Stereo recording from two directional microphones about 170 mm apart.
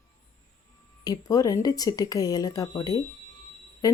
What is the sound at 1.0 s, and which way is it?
Speech, 20° left (ahead or behind).